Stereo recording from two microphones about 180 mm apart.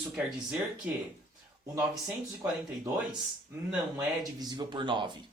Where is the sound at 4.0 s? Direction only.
20° right (ahead or behind).